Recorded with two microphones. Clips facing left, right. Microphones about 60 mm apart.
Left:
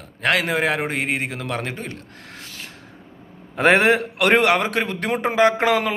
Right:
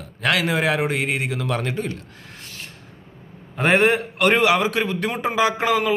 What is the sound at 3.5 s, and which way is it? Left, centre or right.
A man's voice, left.